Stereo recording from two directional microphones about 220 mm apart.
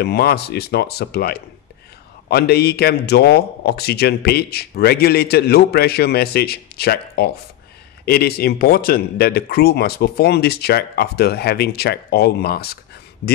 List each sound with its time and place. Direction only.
0.0 s a man's voice: 45° left (ahead or behind)